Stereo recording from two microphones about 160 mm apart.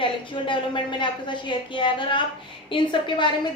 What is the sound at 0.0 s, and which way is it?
A woman's voice, 30° left (ahead or behind).